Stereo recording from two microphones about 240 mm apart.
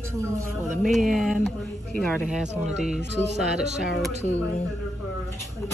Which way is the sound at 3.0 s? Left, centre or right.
Right.